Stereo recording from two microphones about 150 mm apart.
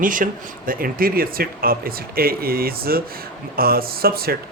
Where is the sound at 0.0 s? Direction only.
65° right (ahead or behind).